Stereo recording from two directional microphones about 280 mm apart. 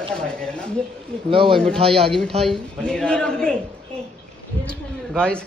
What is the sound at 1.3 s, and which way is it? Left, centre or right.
Speech, centre.